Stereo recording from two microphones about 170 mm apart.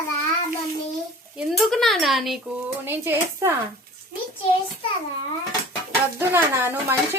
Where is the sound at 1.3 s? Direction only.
Centre (ahead or behind).